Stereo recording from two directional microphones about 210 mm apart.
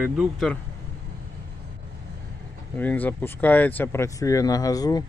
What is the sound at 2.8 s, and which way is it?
Speech, 10° left (ahead or behind).